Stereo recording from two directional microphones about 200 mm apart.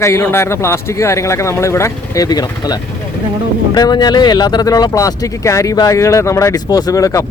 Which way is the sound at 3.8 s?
20° left (ahead or behind).